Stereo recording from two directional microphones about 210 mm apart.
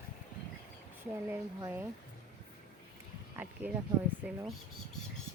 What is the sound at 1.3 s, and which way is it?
Speech, 10° right (ahead or behind).